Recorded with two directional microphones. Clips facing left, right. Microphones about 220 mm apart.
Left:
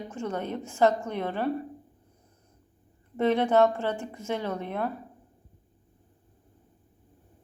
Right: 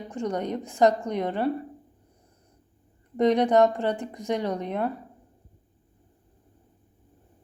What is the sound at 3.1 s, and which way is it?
A woman's voice, 15° right (ahead or behind).